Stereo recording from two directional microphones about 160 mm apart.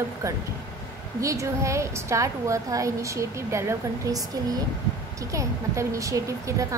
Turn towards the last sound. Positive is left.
turn(degrees=-20)  # may be behind; listen again after turning